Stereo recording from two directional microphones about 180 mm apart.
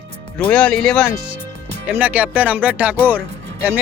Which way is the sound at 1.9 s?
10° right (ahead or behind).